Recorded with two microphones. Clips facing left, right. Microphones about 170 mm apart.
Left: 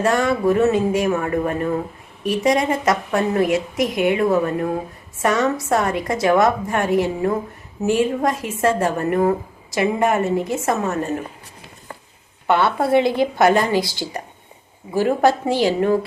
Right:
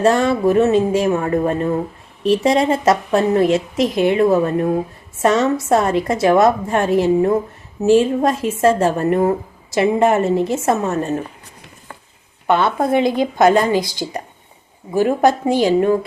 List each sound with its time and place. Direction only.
0.0 s a woman's voice: 25° right (ahead or behind)
12.5 s a woman's voice: 20° right (ahead or behind)